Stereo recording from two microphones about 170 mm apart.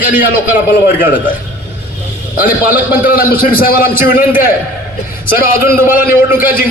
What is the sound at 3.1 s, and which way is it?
A man's voice, 55° left (ahead or behind).